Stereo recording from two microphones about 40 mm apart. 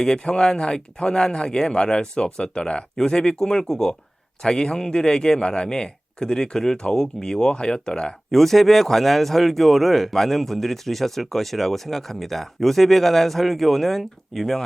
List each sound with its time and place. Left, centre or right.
0.0 s a man's voice: centre
8.3 s speech: centre